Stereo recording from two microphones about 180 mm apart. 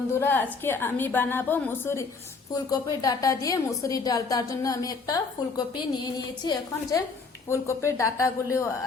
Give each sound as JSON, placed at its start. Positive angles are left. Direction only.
{"t": 0.1, "sound": "a woman's voice", "side_deg": 10}